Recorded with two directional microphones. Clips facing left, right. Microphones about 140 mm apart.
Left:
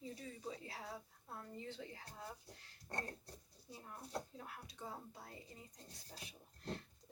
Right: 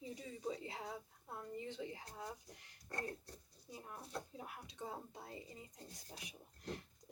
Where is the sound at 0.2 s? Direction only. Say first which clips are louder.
Right 4 dB; 20° right (ahead or behind).